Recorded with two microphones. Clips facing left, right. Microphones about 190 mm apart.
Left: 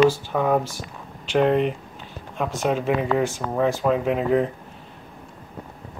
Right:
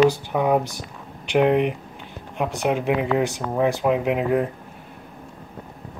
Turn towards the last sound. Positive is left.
turn(degrees=-15)  # may be behind; listen again after turning